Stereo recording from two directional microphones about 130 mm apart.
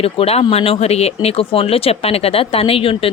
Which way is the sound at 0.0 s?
50° left (ahead or behind).